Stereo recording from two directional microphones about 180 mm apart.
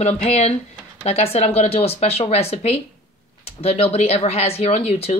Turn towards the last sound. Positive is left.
turn(degrees=35)  # may be behind; listen again after turning